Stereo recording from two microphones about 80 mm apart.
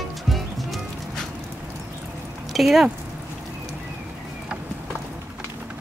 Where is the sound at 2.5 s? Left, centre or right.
Centre.